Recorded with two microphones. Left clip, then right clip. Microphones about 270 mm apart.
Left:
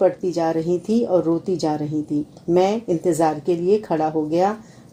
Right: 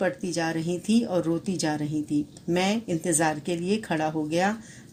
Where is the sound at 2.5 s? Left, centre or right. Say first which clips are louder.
Left 8 dB; right.